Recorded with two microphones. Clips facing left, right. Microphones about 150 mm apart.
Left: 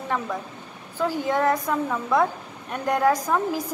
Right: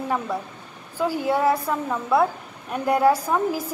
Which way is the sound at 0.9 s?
10° right (ahead or behind).